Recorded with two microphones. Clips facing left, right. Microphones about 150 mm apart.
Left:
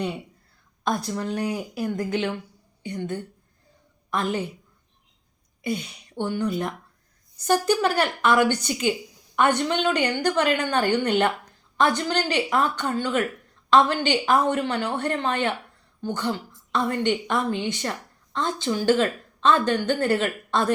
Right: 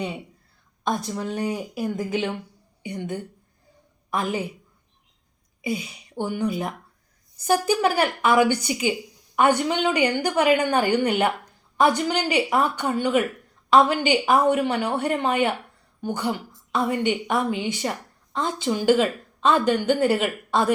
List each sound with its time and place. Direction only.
0.9 s a woman's voice: centre (ahead or behind)
5.6 s a woman's voice: 5° right (ahead or behind)